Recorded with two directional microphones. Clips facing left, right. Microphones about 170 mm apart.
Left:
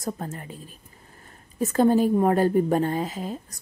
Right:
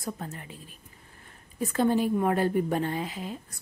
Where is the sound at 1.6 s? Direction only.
40° left (ahead or behind).